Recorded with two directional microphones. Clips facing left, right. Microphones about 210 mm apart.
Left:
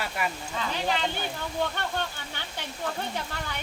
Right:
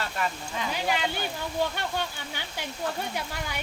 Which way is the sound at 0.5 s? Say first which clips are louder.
Even; 10° right (ahead or behind).